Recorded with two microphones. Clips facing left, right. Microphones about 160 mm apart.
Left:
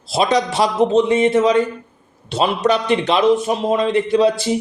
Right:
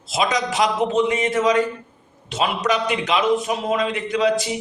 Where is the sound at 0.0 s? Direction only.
30° left (ahead or behind).